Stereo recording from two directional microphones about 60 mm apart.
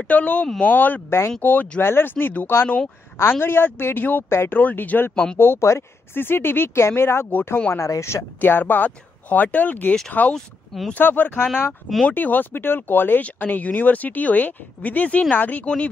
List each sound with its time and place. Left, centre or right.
0.1 s speech: left
4.3 s speech: left
4.6 s speech: left
5.6 s speech: left
6.1 s speech: left
7.7 s speech: left
8.4 s speech: left
10.3 s speech: centre
11.0 s speech: left
15.6 s speech: centre